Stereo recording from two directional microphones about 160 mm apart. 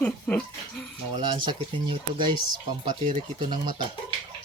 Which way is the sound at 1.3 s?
30° right (ahead or behind).